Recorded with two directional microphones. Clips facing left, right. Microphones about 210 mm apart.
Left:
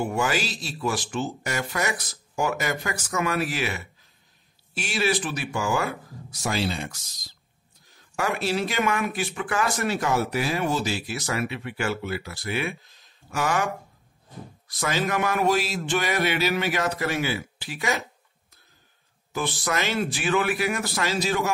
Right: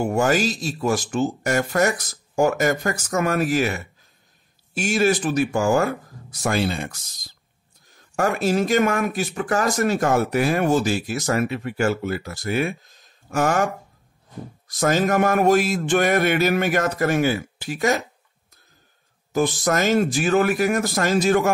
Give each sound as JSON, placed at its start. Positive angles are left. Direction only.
{"t": 0.0, "sound": "speech", "side_deg": -45}
{"t": 8.2, "sound": "speech", "side_deg": -45}
{"t": 14.7, "sound": "speech", "side_deg": -45}
{"t": 19.3, "sound": "speech", "side_deg": -45}